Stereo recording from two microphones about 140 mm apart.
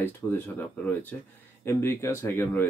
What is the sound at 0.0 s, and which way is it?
Speech, 15° left (ahead or behind).